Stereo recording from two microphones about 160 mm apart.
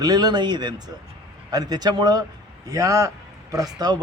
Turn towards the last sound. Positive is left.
turn(degrees=-25)  # may be behind; listen again after turning